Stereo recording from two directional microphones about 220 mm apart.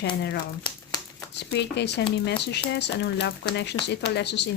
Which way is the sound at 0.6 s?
15° left (ahead or behind).